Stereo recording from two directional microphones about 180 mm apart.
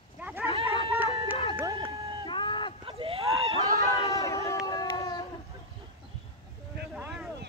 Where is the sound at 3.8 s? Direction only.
20° left (ahead or behind).